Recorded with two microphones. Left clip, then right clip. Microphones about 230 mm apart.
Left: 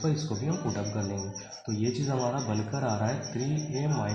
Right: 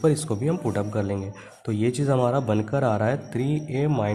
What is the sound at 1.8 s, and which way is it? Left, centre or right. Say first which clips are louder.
Speech: right 8 dB; right.